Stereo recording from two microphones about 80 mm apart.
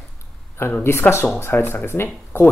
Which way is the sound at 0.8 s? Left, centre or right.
Left.